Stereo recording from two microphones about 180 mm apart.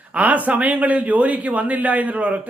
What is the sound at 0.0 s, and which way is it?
Speech, 10° right (ahead or behind).